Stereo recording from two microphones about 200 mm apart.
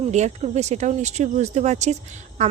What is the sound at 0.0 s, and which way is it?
A woman's voice, 35° right (ahead or behind).